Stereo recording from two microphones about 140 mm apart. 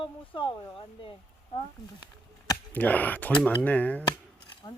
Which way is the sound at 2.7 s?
10° left (ahead or behind).